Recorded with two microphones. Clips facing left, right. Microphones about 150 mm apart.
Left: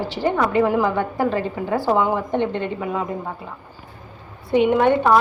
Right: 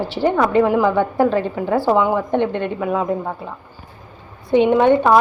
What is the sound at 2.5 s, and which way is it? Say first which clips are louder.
Speech: right 4 dB; 15° right (ahead or behind).